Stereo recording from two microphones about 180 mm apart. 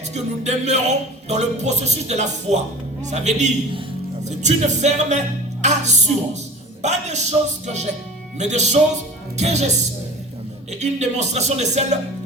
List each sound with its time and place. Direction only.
0.1 s speech: 40° right (ahead or behind)